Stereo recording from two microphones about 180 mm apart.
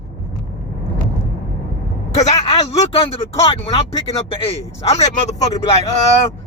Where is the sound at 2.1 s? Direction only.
40° left (ahead or behind).